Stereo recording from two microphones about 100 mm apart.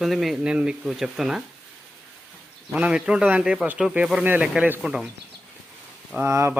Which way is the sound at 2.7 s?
10° right (ahead or behind).